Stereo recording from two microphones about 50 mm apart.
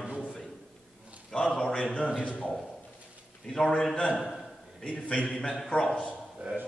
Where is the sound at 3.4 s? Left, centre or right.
Centre.